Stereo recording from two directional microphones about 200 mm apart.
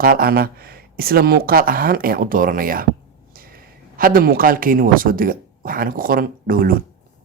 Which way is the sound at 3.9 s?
45° right (ahead or behind).